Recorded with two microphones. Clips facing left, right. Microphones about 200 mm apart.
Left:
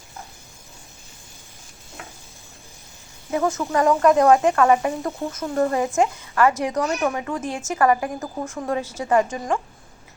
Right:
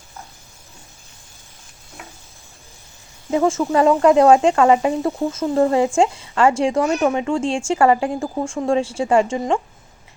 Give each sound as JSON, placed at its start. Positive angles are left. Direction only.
{"t": 3.3, "sound": "speech", "side_deg": -25}